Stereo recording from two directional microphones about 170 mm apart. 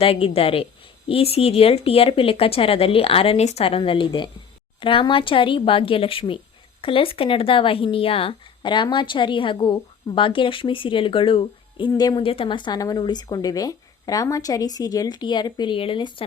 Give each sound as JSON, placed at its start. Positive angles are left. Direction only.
{"t": 0.0, "sound": "speech", "side_deg": 35}